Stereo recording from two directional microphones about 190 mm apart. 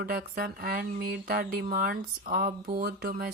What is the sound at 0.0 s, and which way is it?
Speech, 50° right (ahead or behind).